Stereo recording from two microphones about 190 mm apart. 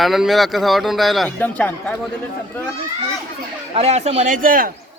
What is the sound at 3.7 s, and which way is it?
Speech, 35° right (ahead or behind).